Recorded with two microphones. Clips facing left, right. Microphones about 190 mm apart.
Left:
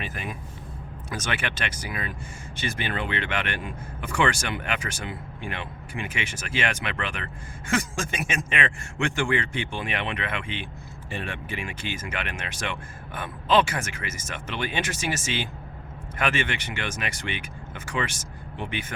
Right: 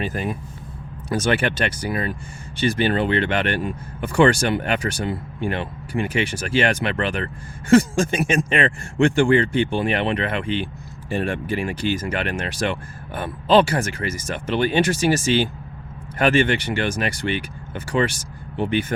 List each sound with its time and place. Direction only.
0.0 s speech: 35° right (ahead or behind)